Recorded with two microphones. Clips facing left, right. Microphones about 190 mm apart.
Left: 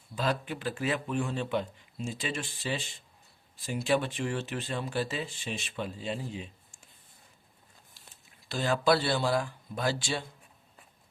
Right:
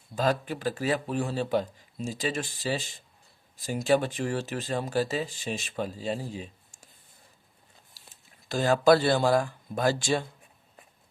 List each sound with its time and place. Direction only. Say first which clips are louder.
0.2 s speech: right 4 dB; 40° right (ahead or behind)
8.4 s speech: right 5 dB; 45° right (ahead or behind)